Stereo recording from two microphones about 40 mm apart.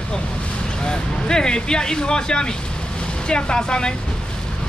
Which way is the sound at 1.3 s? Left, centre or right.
Left.